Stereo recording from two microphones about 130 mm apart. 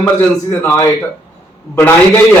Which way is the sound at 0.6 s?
20° left (ahead or behind).